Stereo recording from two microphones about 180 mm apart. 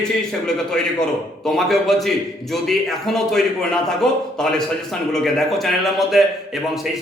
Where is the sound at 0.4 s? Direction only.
5° left (ahead or behind).